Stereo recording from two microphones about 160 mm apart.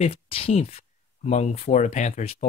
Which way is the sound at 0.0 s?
35° left (ahead or behind).